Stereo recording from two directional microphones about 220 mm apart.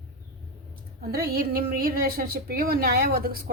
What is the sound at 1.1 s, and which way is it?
A woman's voice, 45° right (ahead or behind).